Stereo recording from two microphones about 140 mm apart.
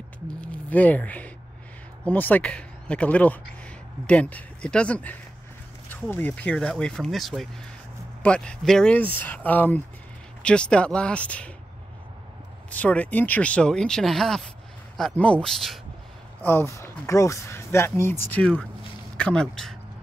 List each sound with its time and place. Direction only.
0.3 s speech: 10° left (ahead or behind)
12.6 s speech: 10° left (ahead or behind)
16.4 s speech: 15° left (ahead or behind)
19.1 s speech: 5° left (ahead or behind)